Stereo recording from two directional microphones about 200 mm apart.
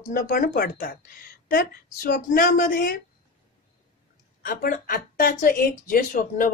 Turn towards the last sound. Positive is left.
turn(degrees=45)  # may be behind; listen again after turning